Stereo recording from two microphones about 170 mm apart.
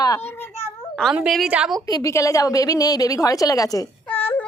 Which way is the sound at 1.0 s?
Centre (ahead or behind).